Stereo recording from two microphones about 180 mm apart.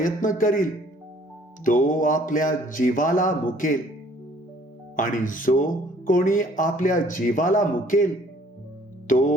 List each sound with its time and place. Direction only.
0.0 s speech: 50° left (ahead or behind)
4.9 s speech: 50° left (ahead or behind)
9.0 s music: 45° left (ahead or behind)